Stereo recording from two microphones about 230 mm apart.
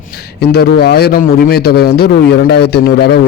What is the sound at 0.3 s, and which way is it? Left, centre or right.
A man's voice, left.